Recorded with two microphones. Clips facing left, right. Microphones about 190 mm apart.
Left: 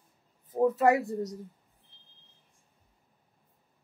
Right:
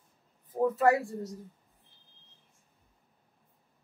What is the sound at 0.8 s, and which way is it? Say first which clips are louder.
Speech: left 1 dB; 20° left (ahead or behind).